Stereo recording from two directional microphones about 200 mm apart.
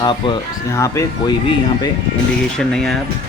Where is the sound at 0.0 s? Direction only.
20° left (ahead or behind).